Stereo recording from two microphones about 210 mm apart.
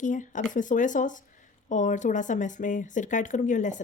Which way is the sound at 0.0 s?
35° left (ahead or behind).